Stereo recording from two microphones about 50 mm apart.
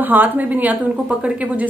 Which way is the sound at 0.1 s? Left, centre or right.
Right.